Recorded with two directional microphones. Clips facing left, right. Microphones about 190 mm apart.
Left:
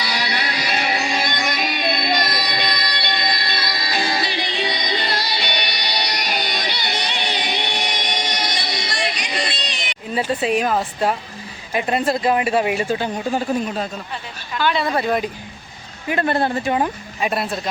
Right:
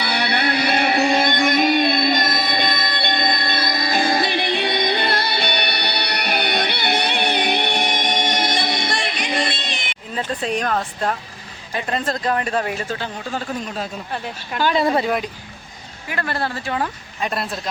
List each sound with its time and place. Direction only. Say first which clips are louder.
0.0 s music: right 4 dB; 60° right (ahead or behind)
10.2 s speech: left 4 dB; 5° left (ahead or behind)
14.1 s a woman's voice: right 3 dB; 45° right (ahead or behind)
16.0 s speech: left 6 dB; 20° left (ahead or behind)
17.2 s speech: left 2 dB; 5° left (ahead or behind)